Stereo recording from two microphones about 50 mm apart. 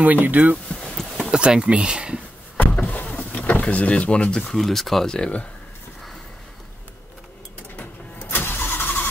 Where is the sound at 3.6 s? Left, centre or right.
Left.